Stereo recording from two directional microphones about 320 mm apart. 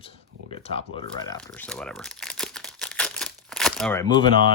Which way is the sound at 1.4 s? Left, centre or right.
Centre.